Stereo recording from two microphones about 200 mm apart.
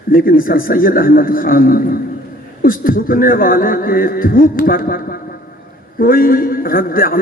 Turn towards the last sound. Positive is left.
turn(degrees=45)  # may be behind; listen again after turning